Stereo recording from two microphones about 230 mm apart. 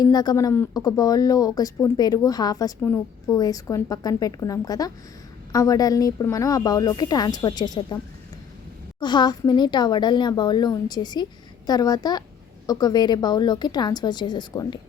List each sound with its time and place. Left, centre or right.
0.0 s speech: centre